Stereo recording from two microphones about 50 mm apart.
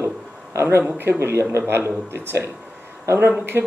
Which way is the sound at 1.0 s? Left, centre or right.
Right.